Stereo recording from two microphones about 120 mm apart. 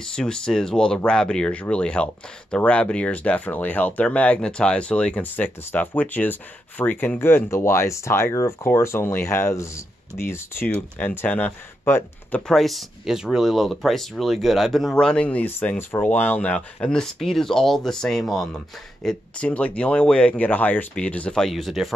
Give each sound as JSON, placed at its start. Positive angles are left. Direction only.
{"t": 0.1, "sound": "speech", "side_deg": 5}
{"t": 12.4, "sound": "speech", "side_deg": 0}